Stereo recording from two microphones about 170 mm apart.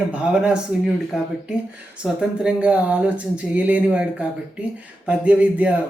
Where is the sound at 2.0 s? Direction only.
5° right (ahead or behind).